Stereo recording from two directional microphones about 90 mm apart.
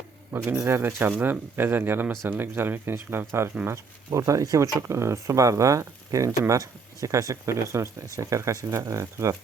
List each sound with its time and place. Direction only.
0.4 s speech: 25° right (ahead or behind)
4.1 s speech: 35° right (ahead or behind)